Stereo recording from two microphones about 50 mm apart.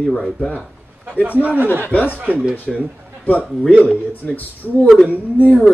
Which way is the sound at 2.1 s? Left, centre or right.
Right.